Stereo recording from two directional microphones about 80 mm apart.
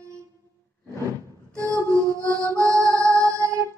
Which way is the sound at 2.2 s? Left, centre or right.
Right.